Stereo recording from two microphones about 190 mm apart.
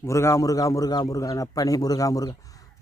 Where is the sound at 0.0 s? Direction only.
15° left (ahead or behind).